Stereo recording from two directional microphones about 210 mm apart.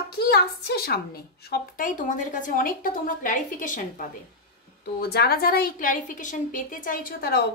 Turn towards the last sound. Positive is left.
turn(degrees=45)  # may be behind; listen again after turning